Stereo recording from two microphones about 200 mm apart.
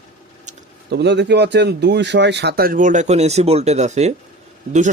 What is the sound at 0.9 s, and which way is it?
Speech, 60° right (ahead or behind).